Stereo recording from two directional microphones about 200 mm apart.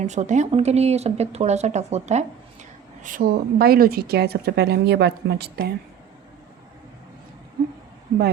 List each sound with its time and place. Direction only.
0.0 s a woman's voice: 35° right (ahead or behind); by 5.7 s 55° right (ahead or behind)